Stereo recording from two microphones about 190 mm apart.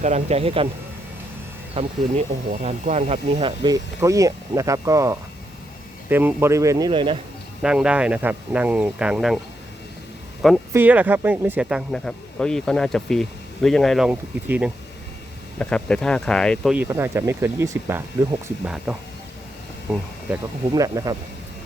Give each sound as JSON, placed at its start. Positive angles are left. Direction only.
{"t": 0.0, "sound": "speech", "side_deg": -35}
{"t": 1.7, "sound": "speech", "side_deg": -30}
{"t": 3.3, "sound": "speech", "side_deg": -25}
{"t": 7.6, "sound": "speech", "side_deg": -5}
{"t": 10.7, "sound": "speech", "side_deg": -10}
{"t": 15.5, "sound": "speech", "side_deg": 5}
{"t": 16.7, "sound": "speech", "side_deg": -10}
{"t": 20.7, "sound": "speech", "side_deg": -20}